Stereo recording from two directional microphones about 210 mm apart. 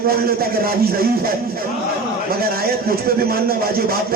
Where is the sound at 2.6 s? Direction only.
45° right (ahead or behind).